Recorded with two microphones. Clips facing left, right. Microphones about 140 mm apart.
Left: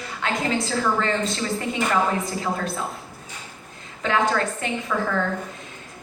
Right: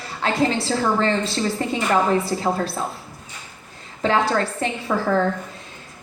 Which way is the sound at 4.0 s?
35° right (ahead or behind).